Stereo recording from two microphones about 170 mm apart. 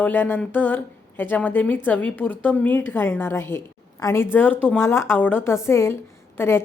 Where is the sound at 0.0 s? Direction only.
10° left (ahead or behind).